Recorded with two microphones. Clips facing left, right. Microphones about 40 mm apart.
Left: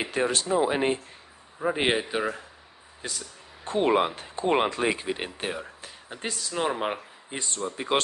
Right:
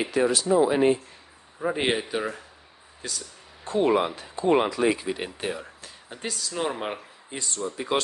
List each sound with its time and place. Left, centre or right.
0.1 s speech: left
1.6 s a man's voice: centre
3.0 s speech: left
5.8 s speech: left
7.3 s speech: left